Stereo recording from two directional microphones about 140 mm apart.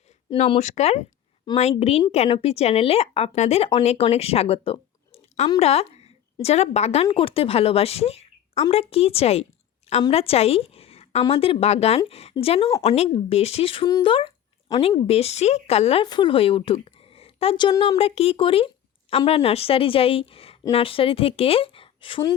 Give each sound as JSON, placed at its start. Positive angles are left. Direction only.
{"t": 0.3, "sound": "a woman's voice", "side_deg": 45}
{"t": 1.5, "sound": "a woman's voice", "side_deg": 30}
{"t": 1.8, "sound": "a woman's voice", "side_deg": 50}
{"t": 16.0, "sound": "a woman's voice", "side_deg": 35}